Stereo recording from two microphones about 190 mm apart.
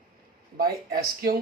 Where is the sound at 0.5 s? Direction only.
55° right (ahead or behind).